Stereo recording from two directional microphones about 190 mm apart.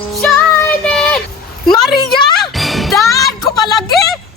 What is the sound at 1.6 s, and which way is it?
Music, centre (ahead or behind).